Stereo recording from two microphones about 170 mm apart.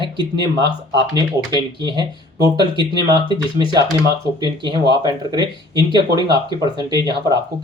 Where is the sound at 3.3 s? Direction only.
25° right (ahead or behind).